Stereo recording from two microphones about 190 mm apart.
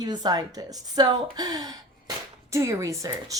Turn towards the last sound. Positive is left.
turn(degrees=-15)  # may be behind; listen again after turning